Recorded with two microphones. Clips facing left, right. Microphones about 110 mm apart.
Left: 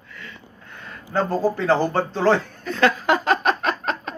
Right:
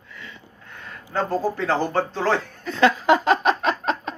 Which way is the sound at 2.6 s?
25° right (ahead or behind).